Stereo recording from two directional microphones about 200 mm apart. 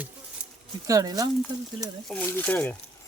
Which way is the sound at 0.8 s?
15° right (ahead or behind).